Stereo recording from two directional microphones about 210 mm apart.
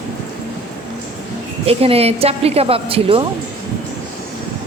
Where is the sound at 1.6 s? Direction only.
30° right (ahead or behind).